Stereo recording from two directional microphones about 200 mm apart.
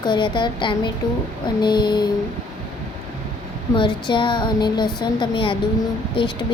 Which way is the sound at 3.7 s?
25° left (ahead or behind).